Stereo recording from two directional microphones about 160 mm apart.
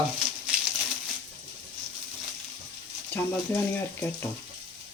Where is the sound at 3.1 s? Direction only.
15° left (ahead or behind).